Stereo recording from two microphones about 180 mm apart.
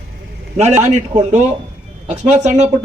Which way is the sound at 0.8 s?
40° right (ahead or behind).